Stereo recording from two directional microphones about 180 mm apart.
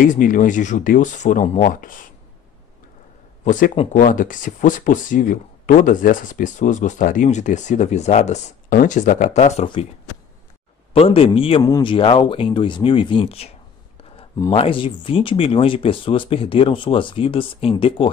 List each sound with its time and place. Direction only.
0.1 s speech: 45° left (ahead or behind)
3.4 s speech: 45° left (ahead or behind)
10.9 s speech: 30° left (ahead or behind)
14.6 s speech: 30° left (ahead or behind)